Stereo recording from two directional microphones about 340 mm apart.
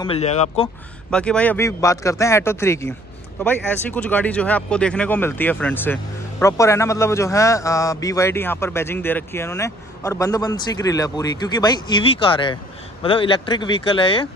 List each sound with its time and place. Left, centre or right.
0.0 s a man's voice: centre
1.1 s a man's voice: centre